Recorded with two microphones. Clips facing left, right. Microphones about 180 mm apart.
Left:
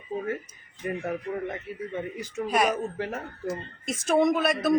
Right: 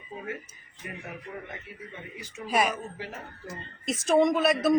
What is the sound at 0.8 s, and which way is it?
Speech, 40° left (ahead or behind).